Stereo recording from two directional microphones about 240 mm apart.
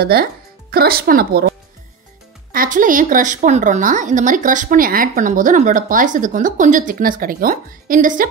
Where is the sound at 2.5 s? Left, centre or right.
Right.